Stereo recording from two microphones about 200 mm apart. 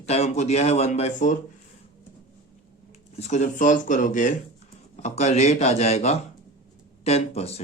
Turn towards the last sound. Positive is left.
turn(degrees=30)  # may be behind; listen again after turning